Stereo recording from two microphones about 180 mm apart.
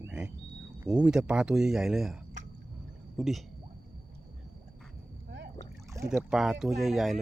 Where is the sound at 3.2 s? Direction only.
Centre (ahead or behind).